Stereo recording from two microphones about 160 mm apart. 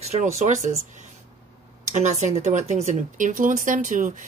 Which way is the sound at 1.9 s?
45° right (ahead or behind).